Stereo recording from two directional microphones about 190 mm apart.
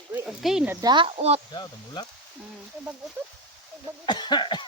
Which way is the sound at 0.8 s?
25° right (ahead or behind).